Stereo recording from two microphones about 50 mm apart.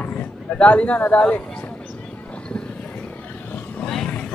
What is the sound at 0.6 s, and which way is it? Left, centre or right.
Speech, left.